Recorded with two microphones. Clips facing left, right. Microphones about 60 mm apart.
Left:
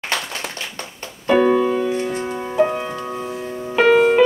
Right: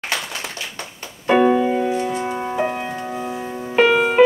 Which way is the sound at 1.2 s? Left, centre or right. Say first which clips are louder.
Even; right.